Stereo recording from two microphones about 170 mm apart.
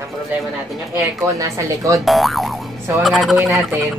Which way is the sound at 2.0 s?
Centre (ahead or behind).